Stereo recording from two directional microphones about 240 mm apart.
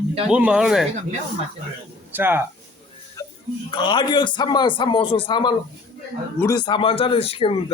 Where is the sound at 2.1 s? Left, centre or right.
Centre.